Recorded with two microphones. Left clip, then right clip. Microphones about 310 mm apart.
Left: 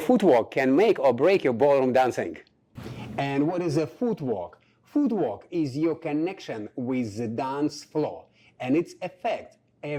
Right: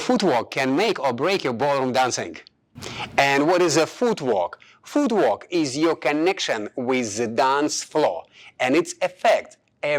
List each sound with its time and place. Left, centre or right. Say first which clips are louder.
0.0 s speech: even; right
3.2 s speech: right 9 dB; centre